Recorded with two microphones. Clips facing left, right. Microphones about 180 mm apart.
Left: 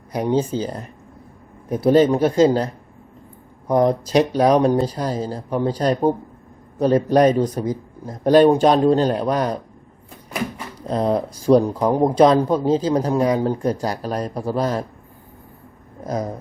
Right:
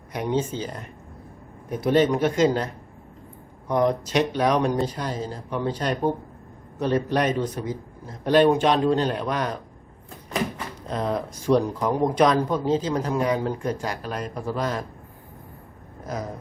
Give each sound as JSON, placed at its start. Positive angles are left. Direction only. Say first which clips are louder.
{"t": 0.1, "sound": "speech", "louder": "left 5 dB", "side_deg": 35}
{"t": 3.7, "sound": "speech", "louder": "left 5 dB", "side_deg": 35}
{"t": 10.8, "sound": "speech", "louder": "left 7 dB", "side_deg": 35}